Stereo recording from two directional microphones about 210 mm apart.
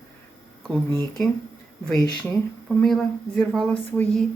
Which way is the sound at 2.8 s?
Centre (ahead or behind).